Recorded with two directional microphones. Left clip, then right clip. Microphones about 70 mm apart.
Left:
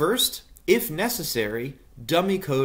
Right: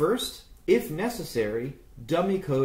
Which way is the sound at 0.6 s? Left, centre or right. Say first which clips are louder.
Left 2 dB; left.